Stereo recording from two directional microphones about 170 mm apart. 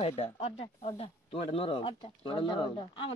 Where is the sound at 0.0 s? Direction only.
35° left (ahead or behind).